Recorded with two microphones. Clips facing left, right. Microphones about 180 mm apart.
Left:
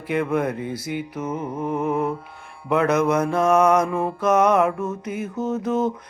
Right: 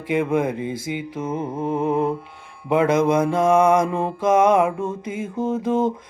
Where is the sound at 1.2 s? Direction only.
25° right (ahead or behind).